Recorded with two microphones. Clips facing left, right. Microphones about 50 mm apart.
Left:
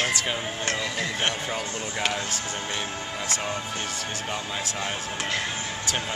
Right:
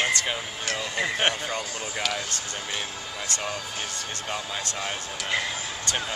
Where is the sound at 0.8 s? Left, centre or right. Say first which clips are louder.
Right 6 dB; centre.